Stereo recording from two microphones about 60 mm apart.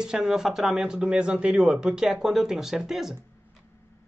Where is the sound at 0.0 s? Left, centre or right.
Centre.